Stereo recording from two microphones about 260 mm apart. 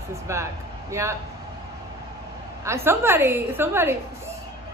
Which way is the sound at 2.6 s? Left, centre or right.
Centre.